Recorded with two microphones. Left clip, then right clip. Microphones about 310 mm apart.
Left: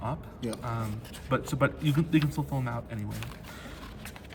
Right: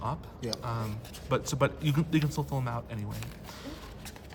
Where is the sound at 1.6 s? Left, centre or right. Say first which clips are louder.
Left 1 dB; centre.